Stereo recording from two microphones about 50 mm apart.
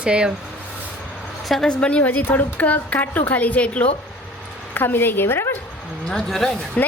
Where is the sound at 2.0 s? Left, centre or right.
Left.